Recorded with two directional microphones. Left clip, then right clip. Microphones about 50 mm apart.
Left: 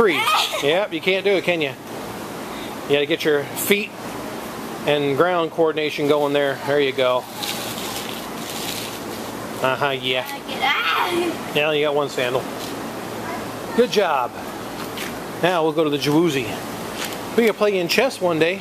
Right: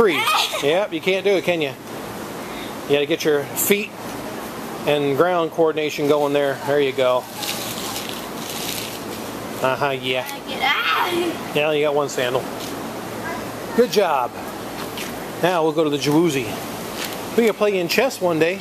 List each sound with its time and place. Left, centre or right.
0.0 s speech: centre
0.7 s speech: right
2.9 s speech: centre
9.8 s speech: right
10.6 s a sound: centre
11.5 s speech: right
12.2 s speech: centre
13.7 s speech: right
15.4 s speech: centre
17.6 s speech: centre
18.0 s speech: centre